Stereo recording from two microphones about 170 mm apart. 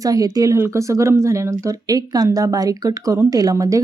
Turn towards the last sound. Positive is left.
turn(degrees=-20)  # may be behind; listen again after turning